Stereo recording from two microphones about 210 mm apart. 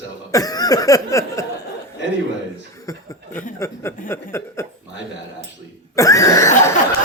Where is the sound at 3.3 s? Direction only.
10° left (ahead or behind).